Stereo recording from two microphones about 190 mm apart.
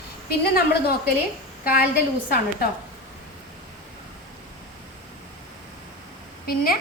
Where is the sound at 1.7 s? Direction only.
50° left (ahead or behind).